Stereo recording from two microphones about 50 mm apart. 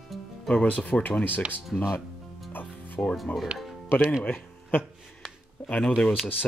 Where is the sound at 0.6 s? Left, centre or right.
Left.